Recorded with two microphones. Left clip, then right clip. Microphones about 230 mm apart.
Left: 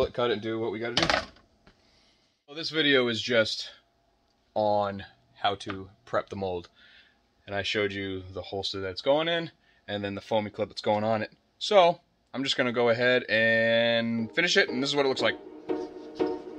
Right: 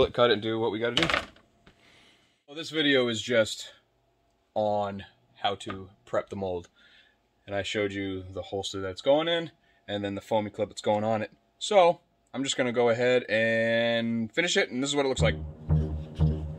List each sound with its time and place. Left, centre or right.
0.0 s speech: right
1.9 s a sound: right
2.4 s speech: centre
4.6 s speech: centre
6.0 s speech: centre